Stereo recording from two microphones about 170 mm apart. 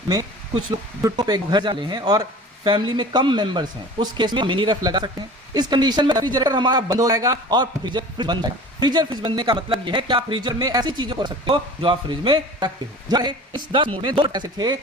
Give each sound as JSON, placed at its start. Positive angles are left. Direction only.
{"t": 0.1, "sound": "speech", "side_deg": -20}